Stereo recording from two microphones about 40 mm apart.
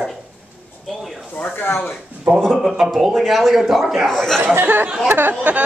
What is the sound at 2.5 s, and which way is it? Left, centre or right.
A man's voice, centre.